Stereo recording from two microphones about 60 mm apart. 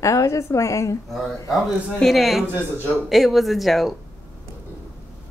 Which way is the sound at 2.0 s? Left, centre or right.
Centre.